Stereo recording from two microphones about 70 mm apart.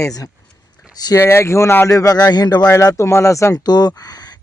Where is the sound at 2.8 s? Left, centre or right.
Left.